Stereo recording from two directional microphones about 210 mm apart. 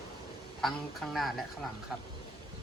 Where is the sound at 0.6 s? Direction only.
Centre (ahead or behind).